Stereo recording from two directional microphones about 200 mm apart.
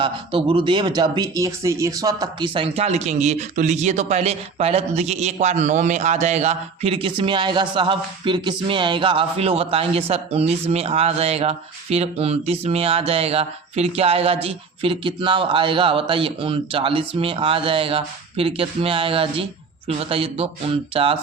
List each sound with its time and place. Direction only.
0.0 s speech: 25° right (ahead or behind)